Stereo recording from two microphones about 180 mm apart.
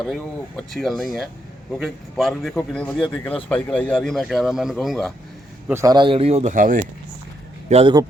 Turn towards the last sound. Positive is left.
turn(degrees=-35)  # may be behind; listen again after turning